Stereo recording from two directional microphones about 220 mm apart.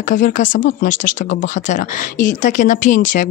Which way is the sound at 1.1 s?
55° left (ahead or behind).